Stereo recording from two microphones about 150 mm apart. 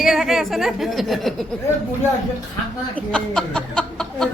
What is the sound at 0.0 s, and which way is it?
Speech, centre (ahead or behind).